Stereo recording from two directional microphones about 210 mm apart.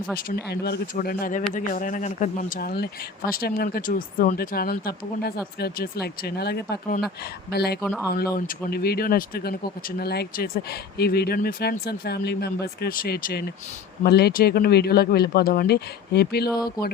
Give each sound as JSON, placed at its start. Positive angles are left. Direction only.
{"t": 0.3, "sound": "speech", "side_deg": 50}
{"t": 16.5, "sound": "speech", "side_deg": 20}